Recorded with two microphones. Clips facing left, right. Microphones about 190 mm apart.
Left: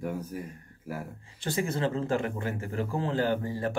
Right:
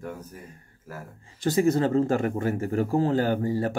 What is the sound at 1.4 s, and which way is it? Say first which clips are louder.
Speech: right 8 dB; 40° right (ahead or behind).